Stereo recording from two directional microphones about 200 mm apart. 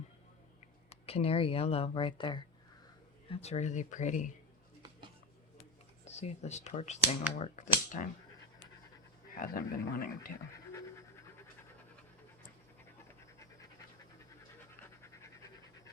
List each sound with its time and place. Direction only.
0.9 s speech: 30° left (ahead or behind)
6.1 s speech: 35° left (ahead or behind)
9.4 s speech: 45° left (ahead or behind)
10.7 s pant: 15° left (ahead or behind)